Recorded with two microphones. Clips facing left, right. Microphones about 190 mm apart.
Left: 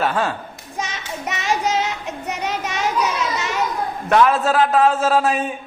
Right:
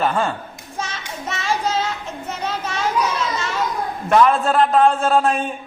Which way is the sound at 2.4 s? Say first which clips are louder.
Even; 15° left (ahead or behind).